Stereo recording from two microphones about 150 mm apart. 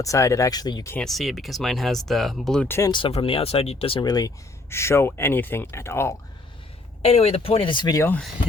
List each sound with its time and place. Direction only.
0.0 s speech: 20° left (ahead or behind)
0.9 s speech: centre (ahead or behind)
2.6 s speech: 15° left (ahead or behind)
2.9 s speech: 35° left (ahead or behind); by 6.1 s 15° left (ahead or behind)
7.0 s speech: 40° left (ahead or behind)
7.9 s speech: 15° left (ahead or behind)